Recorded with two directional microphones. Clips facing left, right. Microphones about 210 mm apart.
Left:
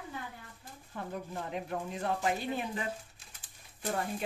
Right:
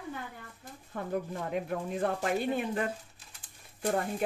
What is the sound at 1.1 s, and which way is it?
Speech, 55° right (ahead or behind).